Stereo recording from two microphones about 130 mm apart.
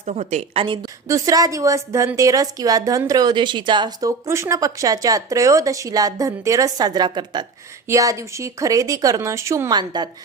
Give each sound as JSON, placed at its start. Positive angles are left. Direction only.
{"t": 0.0, "sound": "a woman's voice", "side_deg": -65}
{"t": 0.6, "sound": "speech", "side_deg": -40}
{"t": 1.0, "sound": "speech", "side_deg": -25}
{"t": 4.3, "sound": "speech", "side_deg": -20}
{"t": 7.9, "sound": "speech", "side_deg": -25}